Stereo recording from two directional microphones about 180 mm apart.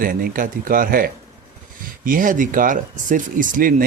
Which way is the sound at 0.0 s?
55° right (ahead or behind).